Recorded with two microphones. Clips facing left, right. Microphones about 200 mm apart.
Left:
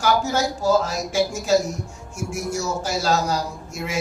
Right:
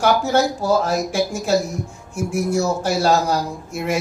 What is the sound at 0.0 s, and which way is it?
Speech, 60° right (ahead or behind).